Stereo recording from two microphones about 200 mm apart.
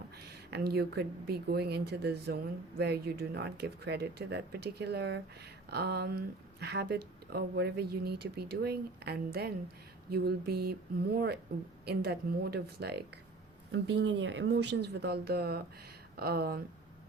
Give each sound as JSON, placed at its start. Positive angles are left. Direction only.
{"t": 0.5, "sound": "speech", "side_deg": -50}